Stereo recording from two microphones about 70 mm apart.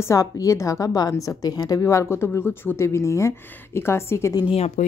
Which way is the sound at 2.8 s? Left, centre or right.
Left.